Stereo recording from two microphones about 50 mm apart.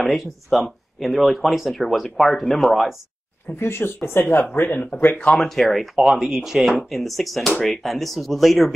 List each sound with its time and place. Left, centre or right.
0.0 s speech: centre
3.5 s speech: left
5.1 s speech: left
5.4 s speech: centre
5.9 s speech: centre